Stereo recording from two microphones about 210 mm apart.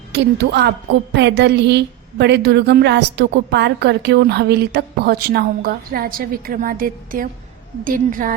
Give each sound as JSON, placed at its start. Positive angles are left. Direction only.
{"t": 0.1, "sound": "a woman's voice", "side_deg": -55}